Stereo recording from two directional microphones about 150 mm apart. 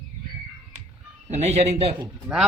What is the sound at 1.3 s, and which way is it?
Speech, 45° right (ahead or behind).